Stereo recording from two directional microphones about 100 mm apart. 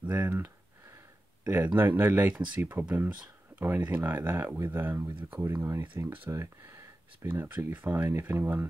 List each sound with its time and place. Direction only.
0.0 s speech: 20° right (ahead or behind)